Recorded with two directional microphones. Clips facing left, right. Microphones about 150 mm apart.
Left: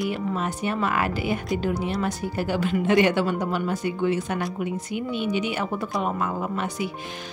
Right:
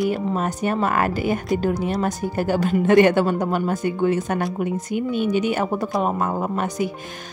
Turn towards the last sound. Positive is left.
turn(degrees=-45)  # may be behind; listen again after turning